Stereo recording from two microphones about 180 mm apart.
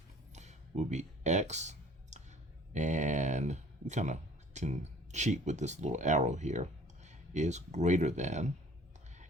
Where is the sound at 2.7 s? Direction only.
45° right (ahead or behind).